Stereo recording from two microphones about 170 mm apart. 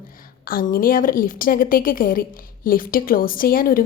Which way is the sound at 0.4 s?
60° left (ahead or behind).